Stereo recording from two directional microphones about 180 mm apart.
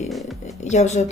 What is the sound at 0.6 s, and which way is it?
Speech, 40° left (ahead or behind).